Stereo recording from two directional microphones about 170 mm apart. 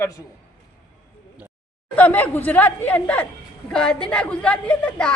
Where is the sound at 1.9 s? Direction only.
10° left (ahead or behind).